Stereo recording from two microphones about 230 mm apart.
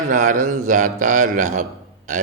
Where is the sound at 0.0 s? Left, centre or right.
Right.